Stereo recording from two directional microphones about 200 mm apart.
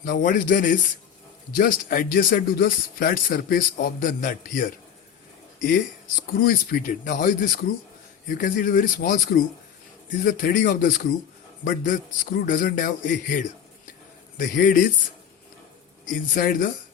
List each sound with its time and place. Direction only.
0.0 s speech: 45° left (ahead or behind)
6.4 s a man's voice: 45° left (ahead or behind)
16.3 s speech: 45° left (ahead or behind)